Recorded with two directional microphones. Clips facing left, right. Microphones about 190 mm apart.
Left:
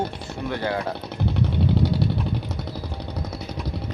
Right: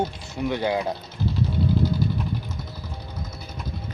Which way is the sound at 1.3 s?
65° left (ahead or behind).